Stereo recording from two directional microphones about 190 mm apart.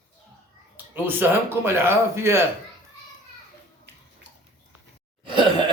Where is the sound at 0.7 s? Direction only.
10° right (ahead or behind).